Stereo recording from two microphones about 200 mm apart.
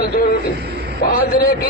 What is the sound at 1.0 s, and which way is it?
Speech, 45° left (ahead or behind).